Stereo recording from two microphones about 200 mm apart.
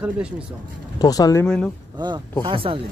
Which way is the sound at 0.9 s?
20° left (ahead or behind).